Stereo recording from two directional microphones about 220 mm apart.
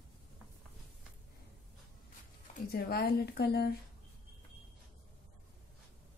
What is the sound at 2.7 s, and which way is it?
Speech, 45° left (ahead or behind).